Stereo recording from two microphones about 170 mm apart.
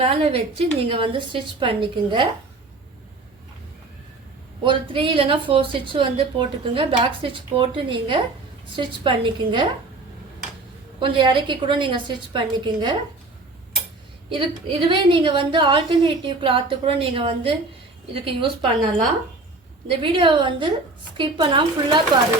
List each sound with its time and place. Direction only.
0.0 s a woman's voice: 35° right (ahead or behind)
4.6 s a woman's voice: 30° right (ahead or behind)
11.0 s a woman's voice: 30° right (ahead or behind)
14.3 s a woman's voice: 30° right (ahead or behind)
19.9 s a woman's voice: 30° right (ahead or behind)